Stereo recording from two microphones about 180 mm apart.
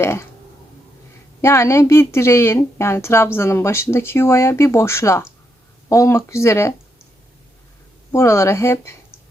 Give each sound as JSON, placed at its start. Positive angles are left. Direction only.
{"t": 0.0, "sound": "a woman's voice", "side_deg": 15}
{"t": 1.4, "sound": "a woman's voice", "side_deg": 15}
{"t": 8.1, "sound": "a woman's voice", "side_deg": 15}